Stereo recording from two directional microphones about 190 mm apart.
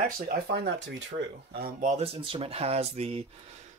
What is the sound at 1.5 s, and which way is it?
Speech, 50° right (ahead or behind).